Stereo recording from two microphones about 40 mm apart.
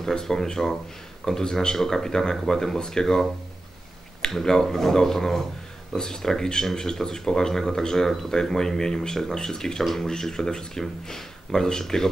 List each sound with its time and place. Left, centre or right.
0.0 s speech: centre
4.3 s speech: centre